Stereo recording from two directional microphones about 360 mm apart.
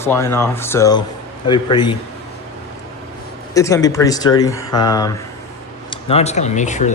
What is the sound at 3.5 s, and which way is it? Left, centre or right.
Speech, centre.